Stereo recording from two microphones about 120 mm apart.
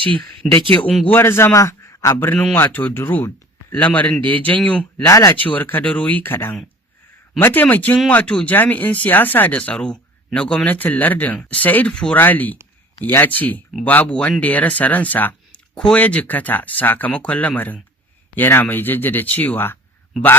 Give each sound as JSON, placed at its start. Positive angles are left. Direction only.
{"t": 0.4, "sound": "speech", "side_deg": 0}
{"t": 1.1, "sound": "a man's voice", "side_deg": 20}
{"t": 5.0, "sound": "a man's voice", "side_deg": 25}